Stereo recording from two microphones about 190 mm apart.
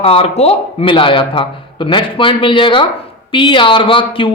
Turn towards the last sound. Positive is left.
turn(degrees=25)  # may be behind; listen again after turning